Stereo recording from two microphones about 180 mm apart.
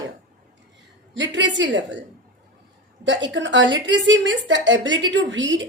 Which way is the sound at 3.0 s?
85° right.